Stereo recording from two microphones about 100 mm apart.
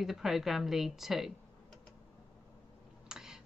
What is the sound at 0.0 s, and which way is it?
Speech, 5° right (ahead or behind).